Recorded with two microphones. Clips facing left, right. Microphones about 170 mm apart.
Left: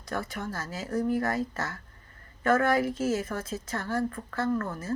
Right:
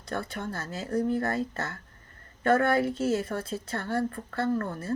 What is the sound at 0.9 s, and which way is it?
Speech, 30° right (ahead or behind).